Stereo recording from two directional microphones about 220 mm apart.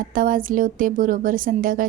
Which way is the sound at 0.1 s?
40° right (ahead or behind).